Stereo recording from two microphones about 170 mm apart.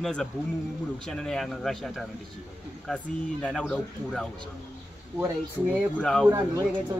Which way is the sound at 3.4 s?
5° left (ahead or behind).